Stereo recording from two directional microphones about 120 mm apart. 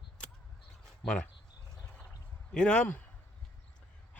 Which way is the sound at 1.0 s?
5° left (ahead or behind).